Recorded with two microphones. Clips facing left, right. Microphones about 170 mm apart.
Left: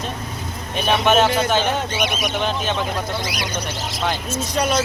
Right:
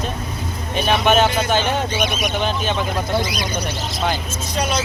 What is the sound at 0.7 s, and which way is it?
Speech, centre (ahead or behind).